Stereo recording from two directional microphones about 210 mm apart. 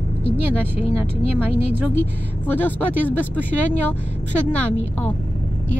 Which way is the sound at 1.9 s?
10° left (ahead or behind).